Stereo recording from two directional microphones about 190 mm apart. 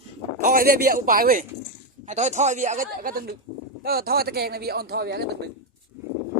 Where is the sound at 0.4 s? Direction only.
50° right (ahead or behind).